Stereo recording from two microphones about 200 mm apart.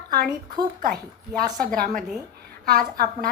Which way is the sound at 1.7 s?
45° right (ahead or behind).